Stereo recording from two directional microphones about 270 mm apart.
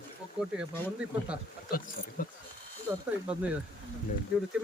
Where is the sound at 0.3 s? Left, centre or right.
Centre.